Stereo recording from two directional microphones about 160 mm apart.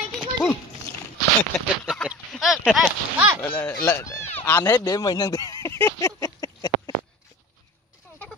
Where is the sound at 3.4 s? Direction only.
10° left (ahead or behind).